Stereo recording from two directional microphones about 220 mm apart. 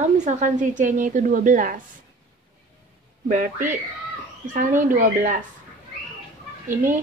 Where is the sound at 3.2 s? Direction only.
35° right (ahead or behind).